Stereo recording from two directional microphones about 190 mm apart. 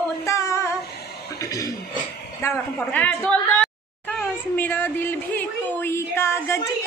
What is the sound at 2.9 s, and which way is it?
A woman's voice, 10° left (ahead or behind).